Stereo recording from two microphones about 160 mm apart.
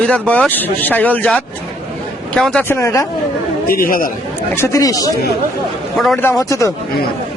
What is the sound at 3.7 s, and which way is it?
Speech, 65° left (ahead or behind).